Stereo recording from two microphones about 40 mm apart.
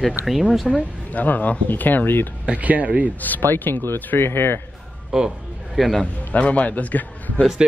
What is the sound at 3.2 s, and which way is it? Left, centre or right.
Speech, left.